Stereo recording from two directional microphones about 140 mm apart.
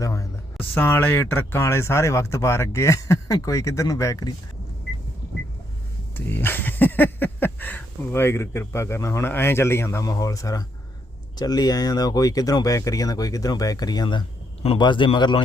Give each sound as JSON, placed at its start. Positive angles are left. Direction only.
{"t": 0.0, "sound": "a sound", "side_deg": 20}
{"t": 0.7, "sound": "speech", "side_deg": 15}
{"t": 6.1, "sound": "speech", "side_deg": 15}